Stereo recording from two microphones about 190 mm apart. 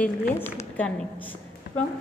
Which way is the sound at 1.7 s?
60° left (ahead or behind).